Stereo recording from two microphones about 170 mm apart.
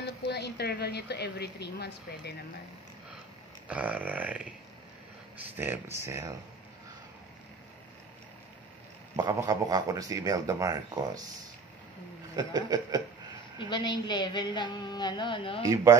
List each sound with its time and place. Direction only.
0.3 s a woman's voice: 70° left (ahead or behind)
3.6 s burping: 10° right (ahead or behind)
5.6 s burping: 15° right (ahead or behind)
9.1 s speech: 20° right (ahead or behind)
12.4 s speech: 25° right (ahead or behind)
13.6 s a woman's voice: 25° left (ahead or behind)
15.7 s speech: 20° right (ahead or behind)